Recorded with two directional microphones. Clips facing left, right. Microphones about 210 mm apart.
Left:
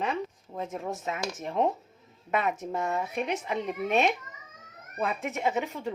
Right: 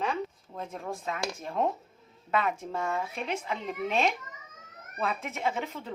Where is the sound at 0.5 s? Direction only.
20° left (ahead or behind).